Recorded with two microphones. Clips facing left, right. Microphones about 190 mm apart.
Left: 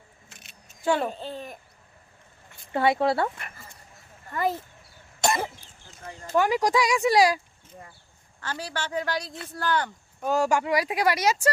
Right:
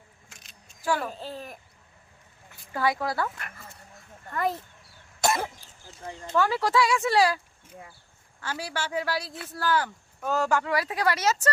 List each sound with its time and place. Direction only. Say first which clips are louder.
0.3 s keys jangling: left 2 dB; 5° left (ahead or behind)
0.8 s speech: left 4 dB; 25° left (ahead or behind)
1.1 s speech: left 2 dB; centre (ahead or behind)
2.7 s speech: left 5 dB; 25° left (ahead or behind)
3.3 s speech: even; centre (ahead or behind)
5.2 s cough: even; centre (ahead or behind)
6.3 s speech: left 2 dB; 15° left (ahead or behind)
7.7 s speech: even; 5° right (ahead or behind)
10.2 s speech: left 2 dB; 15° left (ahead or behind)